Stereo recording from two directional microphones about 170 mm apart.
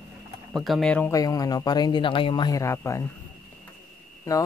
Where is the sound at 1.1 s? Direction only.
20° left (ahead or behind).